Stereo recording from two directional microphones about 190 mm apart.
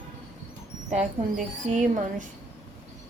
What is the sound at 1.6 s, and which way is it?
Speech, 40° right (ahead or behind).